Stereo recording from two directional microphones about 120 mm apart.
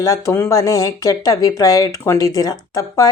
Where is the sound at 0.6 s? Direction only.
30° left (ahead or behind).